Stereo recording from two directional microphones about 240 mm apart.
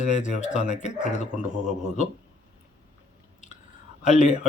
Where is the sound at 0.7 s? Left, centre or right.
Left.